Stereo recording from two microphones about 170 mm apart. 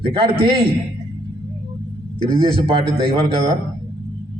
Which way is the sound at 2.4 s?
35° right (ahead or behind).